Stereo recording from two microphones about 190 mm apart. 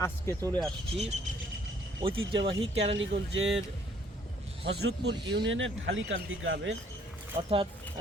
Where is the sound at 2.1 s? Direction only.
90° right.